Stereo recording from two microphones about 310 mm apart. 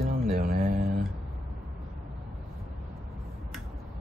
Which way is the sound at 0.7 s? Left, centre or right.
Right.